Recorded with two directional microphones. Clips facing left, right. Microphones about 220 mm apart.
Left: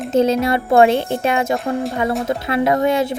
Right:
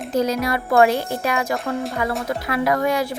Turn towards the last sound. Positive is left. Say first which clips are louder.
# left 4 dB
turn(degrees=25)  # may be behind; listen again after turning